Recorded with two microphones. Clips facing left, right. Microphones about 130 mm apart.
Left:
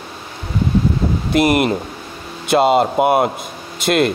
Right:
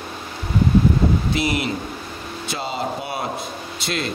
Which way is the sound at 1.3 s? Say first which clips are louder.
Left 8 dB; 55° left (ahead or behind).